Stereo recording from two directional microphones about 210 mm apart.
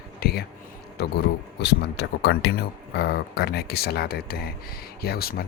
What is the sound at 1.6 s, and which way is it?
Speech, 50° left (ahead or behind).